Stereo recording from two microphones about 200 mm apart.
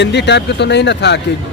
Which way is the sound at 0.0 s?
60° left (ahead or behind).